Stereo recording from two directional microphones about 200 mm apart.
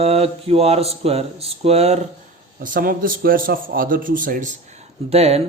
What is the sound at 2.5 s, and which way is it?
A man's voice, 45° right (ahead or behind).